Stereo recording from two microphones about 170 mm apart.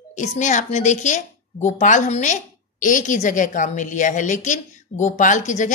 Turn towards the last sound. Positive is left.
turn(degrees=45)  # may be behind; listen again after turning